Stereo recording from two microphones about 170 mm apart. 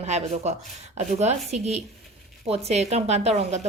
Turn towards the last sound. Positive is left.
turn(degrees=-40)  # may be behind; listen again after turning